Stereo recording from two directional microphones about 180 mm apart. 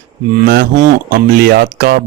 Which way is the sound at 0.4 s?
55° right (ahead or behind).